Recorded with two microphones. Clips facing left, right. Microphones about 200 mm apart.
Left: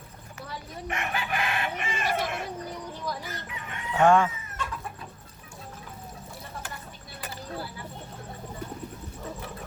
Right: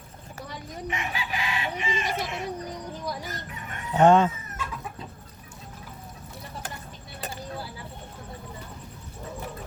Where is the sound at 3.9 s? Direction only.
20° right (ahead or behind).